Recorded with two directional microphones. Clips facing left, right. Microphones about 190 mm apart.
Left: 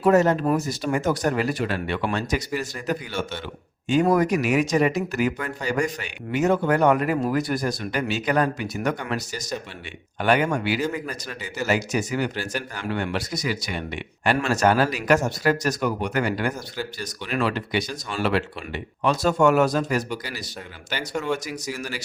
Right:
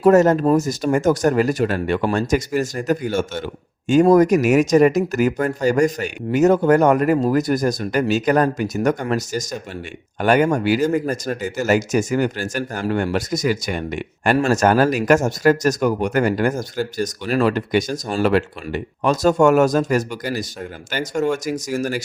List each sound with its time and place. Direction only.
0.0 s speech: 45° right (ahead or behind)